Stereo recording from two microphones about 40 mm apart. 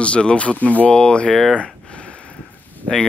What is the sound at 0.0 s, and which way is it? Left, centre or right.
Speech, left.